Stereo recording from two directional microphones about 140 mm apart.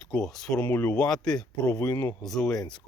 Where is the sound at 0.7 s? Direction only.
15° left (ahead or behind).